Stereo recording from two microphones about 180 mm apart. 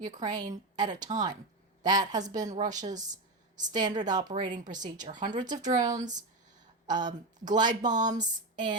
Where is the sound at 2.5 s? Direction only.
45° right (ahead or behind).